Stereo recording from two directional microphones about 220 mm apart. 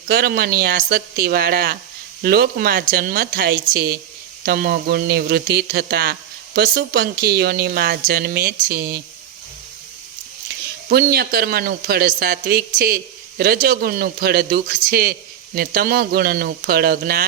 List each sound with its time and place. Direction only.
0.1 s speech: 45° right (ahead or behind)
10.8 s speech: 45° right (ahead or behind)